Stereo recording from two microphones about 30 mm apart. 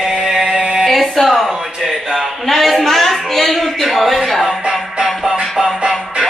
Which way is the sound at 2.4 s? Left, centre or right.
Centre.